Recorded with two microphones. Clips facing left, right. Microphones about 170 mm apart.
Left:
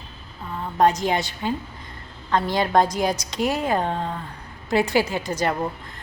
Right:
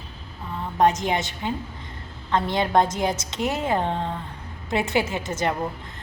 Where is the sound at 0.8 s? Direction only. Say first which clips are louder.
Left 1 dB; 20° right (ahead or behind).